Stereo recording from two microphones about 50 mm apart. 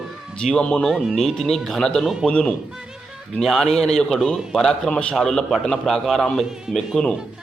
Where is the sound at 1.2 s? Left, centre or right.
Centre.